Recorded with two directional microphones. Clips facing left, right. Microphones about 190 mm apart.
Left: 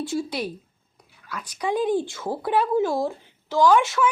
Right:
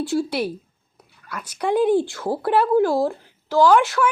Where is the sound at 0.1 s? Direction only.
70° right (ahead or behind).